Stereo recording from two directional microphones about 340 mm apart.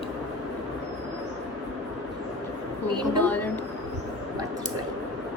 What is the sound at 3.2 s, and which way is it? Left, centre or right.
Speech, centre.